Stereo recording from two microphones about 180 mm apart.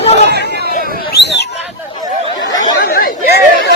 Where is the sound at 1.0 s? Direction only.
65° left (ahead or behind).